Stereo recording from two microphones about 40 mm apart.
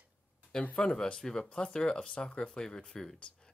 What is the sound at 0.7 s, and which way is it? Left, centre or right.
Speech, centre.